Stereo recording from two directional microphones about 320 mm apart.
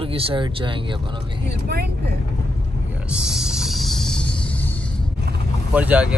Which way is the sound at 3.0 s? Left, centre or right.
Centre.